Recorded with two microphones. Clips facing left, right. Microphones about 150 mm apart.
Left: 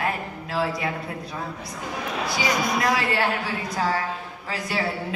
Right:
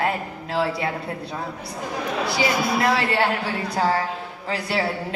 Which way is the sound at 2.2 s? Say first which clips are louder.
Right 2 dB; 30° right (ahead or behind).